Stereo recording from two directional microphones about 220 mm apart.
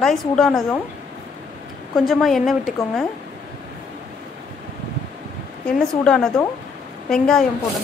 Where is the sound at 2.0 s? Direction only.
Centre (ahead or behind).